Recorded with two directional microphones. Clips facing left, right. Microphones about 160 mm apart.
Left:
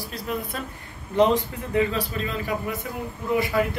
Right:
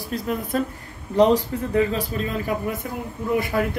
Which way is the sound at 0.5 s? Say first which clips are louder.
Right 9 dB; 45° right (ahead or behind).